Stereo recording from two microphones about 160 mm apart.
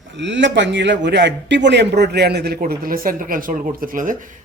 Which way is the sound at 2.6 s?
65° right (ahead or behind).